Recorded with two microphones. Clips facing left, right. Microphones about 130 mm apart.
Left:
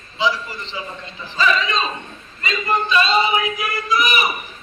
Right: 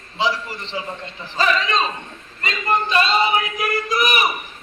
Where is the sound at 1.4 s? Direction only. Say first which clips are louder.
Even; 60° right (ahead or behind).